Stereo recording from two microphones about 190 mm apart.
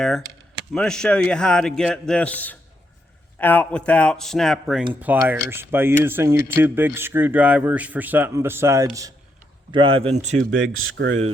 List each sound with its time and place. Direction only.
0.7 s a man's voice: 5° left (ahead or behind); by 9.1 s 15° right (ahead or behind)
9.7 s speech: 25° right (ahead or behind)
10.5 s speech: 90° right